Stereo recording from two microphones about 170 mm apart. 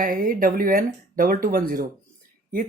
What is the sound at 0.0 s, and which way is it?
Speech, 55° right (ahead or behind).